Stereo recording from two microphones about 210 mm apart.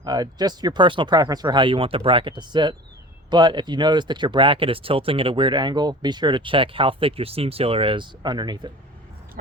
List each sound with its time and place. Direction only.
0.0 s speech: 20° right (ahead or behind)